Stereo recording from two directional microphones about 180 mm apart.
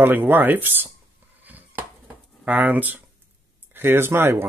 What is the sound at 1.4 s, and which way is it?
Finger snapping, 10° right (ahead or behind).